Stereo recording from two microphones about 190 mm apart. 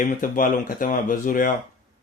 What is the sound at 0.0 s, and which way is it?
Speech, 45° left (ahead or behind).